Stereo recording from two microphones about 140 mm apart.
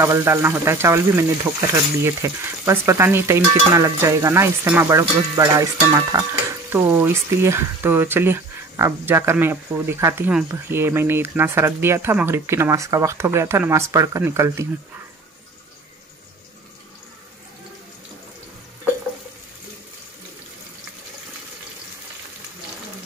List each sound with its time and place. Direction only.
0.0 s speech: 20° right (ahead or behind)